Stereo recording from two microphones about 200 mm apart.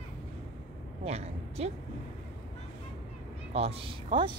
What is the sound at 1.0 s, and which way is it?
Speech, 30° right (ahead or behind).